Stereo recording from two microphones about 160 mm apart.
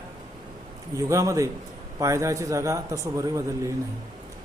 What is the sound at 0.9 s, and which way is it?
Speech, 20° right (ahead or behind).